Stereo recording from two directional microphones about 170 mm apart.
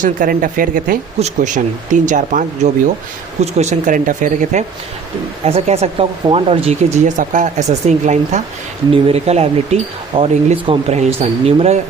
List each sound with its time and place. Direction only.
0.0 s speech: 50° right (ahead or behind)
5.5 s speech: 35° right (ahead or behind)